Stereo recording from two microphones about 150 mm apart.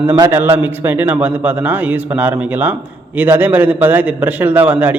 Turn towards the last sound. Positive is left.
turn(degrees=-10)  # may be behind; listen again after turning